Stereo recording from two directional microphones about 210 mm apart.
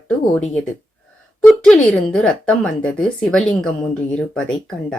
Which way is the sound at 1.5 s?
5° left (ahead or behind).